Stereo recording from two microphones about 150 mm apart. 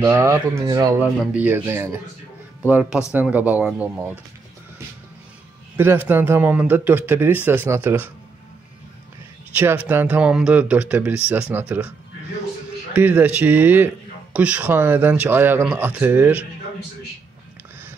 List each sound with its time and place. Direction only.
0.0 s speech: 20° right (ahead or behind)
1.2 s speech: 10° right (ahead or behind)
5.8 s speech: 15° right (ahead or behind)
9.6 s speech: 15° right (ahead or behind)
12.9 s speech: 10° right (ahead or behind)